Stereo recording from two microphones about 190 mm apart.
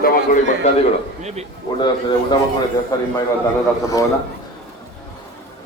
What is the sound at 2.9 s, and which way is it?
Speech, 20° left (ahead or behind).